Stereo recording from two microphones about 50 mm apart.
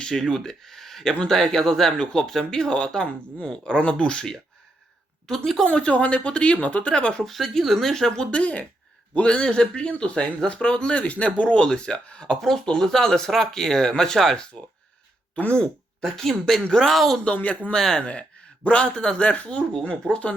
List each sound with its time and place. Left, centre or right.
0.0 s a woman's voice: centre
5.6 s speech: left
7.3 s speech: centre
12.4 s speech: centre
15.4 s speech: left
15.6 s speech: centre
16.9 s speech: centre
18.0 s speech: left